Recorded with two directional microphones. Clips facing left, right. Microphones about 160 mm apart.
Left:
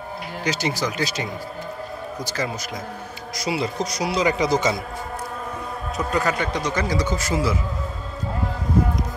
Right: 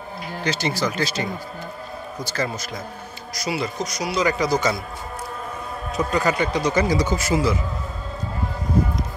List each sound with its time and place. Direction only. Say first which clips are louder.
0.4 s speech: right 1 dB; 15° left (ahead or behind)
3.3 s a man's voice: left 1 dB; 25° left (ahead or behind)
5.9 s speech: right 2 dB; centre (ahead or behind)